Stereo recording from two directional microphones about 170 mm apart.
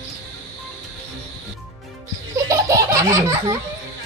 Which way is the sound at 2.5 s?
20° right (ahead or behind).